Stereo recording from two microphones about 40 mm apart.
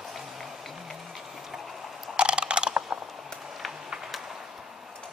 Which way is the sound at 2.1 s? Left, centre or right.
Right.